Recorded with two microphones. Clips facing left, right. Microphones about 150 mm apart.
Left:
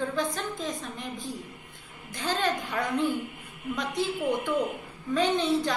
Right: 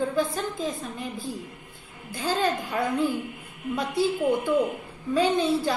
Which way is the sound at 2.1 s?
10° right (ahead or behind).